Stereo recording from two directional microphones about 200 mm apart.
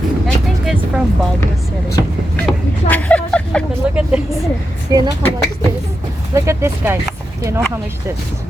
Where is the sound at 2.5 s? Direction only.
5° left (ahead or behind).